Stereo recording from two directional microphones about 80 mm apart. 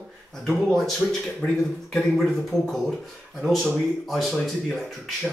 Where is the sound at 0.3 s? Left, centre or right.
Centre.